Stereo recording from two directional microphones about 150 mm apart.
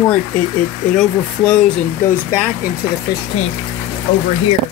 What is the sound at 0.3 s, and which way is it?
Speech, 10° left (ahead or behind).